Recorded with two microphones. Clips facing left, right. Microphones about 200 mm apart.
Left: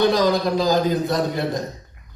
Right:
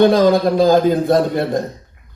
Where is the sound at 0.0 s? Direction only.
55° right (ahead or behind).